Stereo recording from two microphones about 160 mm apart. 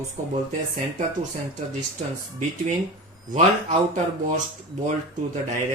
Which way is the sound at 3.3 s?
50° right (ahead or behind).